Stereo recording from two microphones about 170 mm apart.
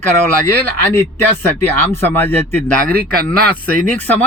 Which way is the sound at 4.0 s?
10° left (ahead or behind).